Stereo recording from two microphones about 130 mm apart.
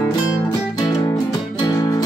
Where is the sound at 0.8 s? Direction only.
30° left (ahead or behind).